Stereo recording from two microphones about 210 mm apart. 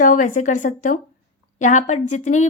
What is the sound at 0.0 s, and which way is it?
A woman's voice, 40° left (ahead or behind).